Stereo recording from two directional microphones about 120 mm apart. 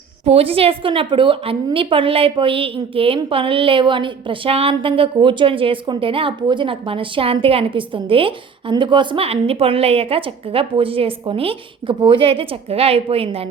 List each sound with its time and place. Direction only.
0.3 s a woman's voice: 55° right (ahead or behind)